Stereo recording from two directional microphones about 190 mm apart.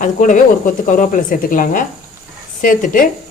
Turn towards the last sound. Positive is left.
turn(degrees=45)  # may be behind; listen again after turning